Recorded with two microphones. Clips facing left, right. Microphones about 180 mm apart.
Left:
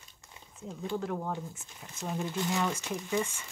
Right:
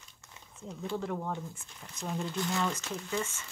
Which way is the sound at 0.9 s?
5° left (ahead or behind).